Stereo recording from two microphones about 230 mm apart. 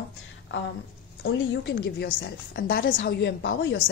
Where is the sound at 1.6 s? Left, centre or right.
Left.